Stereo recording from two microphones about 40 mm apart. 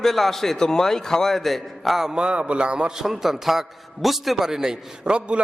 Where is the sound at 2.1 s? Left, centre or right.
Right.